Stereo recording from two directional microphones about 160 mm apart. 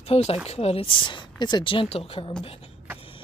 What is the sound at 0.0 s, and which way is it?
A woman's voice, 40° left (ahead or behind).